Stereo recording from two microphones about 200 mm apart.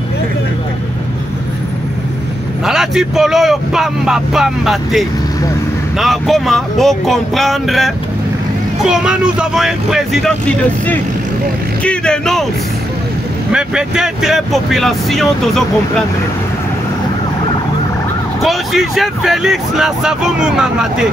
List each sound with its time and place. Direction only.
2.6 s speech: centre (ahead or behind)
11.8 s speech: 5° left (ahead or behind)
13.5 s speech: 5° right (ahead or behind)
18.4 s speech: centre (ahead or behind)